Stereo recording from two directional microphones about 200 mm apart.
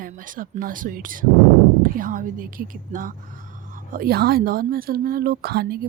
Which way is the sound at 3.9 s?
50° right (ahead or behind).